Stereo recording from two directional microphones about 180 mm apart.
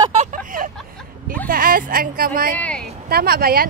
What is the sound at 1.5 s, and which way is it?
A woman's voice, 55° right (ahead or behind).